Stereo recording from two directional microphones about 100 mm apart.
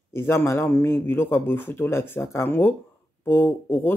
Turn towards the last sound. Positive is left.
turn(degrees=20)  # may be behind; listen again after turning